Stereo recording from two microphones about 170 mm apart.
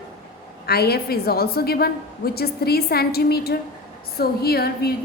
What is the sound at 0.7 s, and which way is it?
A woman's voice, 70° left (ahead or behind).